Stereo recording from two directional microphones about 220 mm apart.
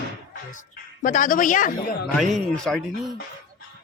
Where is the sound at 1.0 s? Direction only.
40° left (ahead or behind).